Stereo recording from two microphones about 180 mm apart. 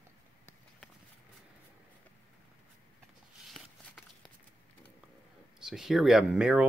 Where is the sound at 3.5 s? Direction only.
Centre (ahead or behind).